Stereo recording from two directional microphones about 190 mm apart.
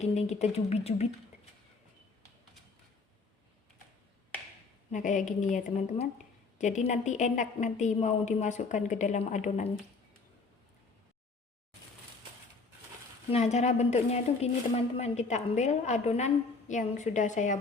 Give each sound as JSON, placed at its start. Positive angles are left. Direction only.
{"t": 0.0, "sound": "speech", "side_deg": 35}
{"t": 4.9, "sound": "speech", "side_deg": 40}
{"t": 13.3, "sound": "speech", "side_deg": 35}